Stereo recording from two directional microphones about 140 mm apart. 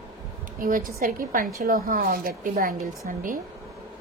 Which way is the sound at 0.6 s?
90° right.